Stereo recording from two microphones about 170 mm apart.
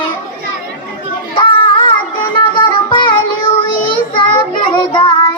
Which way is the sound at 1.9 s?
30° left (ahead or behind).